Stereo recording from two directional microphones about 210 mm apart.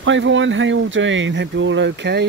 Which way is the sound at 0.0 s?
65° right (ahead or behind).